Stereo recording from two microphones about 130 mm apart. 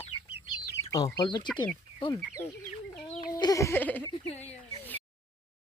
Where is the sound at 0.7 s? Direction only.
25° left (ahead or behind).